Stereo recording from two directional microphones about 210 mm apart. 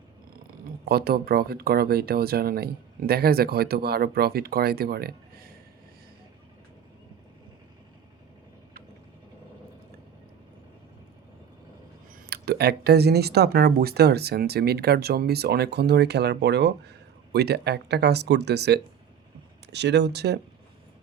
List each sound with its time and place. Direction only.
0.6 s speech: 45° right (ahead or behind)
12.3 s speech: 50° right (ahead or behind)